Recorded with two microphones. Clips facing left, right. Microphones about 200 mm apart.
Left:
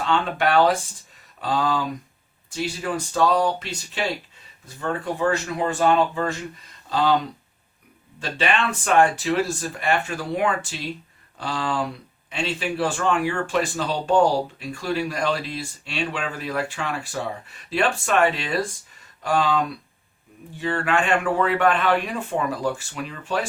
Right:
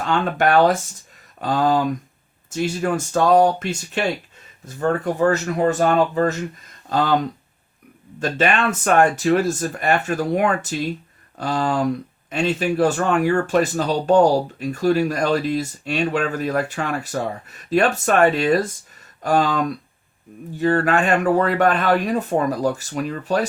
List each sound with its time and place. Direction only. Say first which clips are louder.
0.1 s speech: right 3 dB; 45° right (ahead or behind)
8.2 s speech: right 4 dB; 45° right (ahead or behind)